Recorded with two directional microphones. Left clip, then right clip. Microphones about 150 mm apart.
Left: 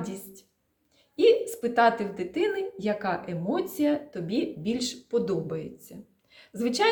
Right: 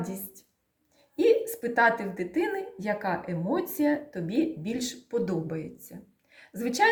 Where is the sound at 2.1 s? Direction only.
20° left (ahead or behind).